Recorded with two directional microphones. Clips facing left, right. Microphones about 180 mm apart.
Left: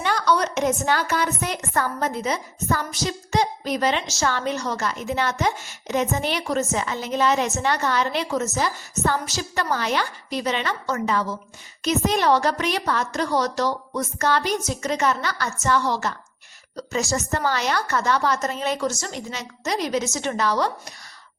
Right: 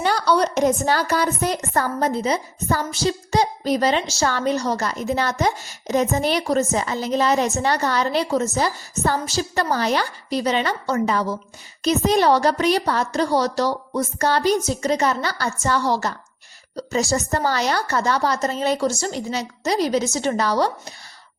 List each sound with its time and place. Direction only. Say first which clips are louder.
0.0 s a woman's voice: right 3 dB; 35° right (ahead or behind)